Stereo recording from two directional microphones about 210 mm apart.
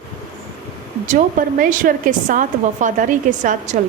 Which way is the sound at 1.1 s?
40° right (ahead or behind).